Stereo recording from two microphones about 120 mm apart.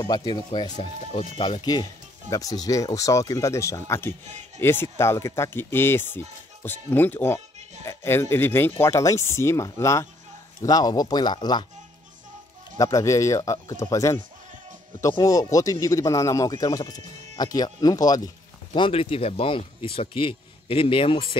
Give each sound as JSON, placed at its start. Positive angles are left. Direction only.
{"t": 0.0, "sound": "speech", "side_deg": 35}
{"t": 12.7, "sound": "speech", "side_deg": 25}
{"t": 15.2, "sound": "speech", "side_deg": 30}
{"t": 18.8, "sound": "speech", "side_deg": 50}